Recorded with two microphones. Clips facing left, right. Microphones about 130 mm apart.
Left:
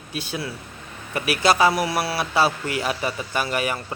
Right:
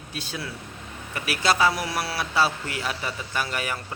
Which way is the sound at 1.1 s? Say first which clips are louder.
Left 4 dB; 15° left (ahead or behind).